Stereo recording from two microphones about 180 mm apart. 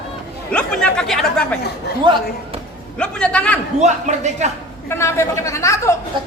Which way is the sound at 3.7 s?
40° right (ahead or behind).